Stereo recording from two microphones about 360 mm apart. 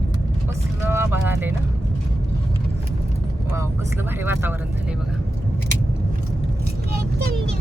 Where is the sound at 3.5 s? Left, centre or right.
Centre.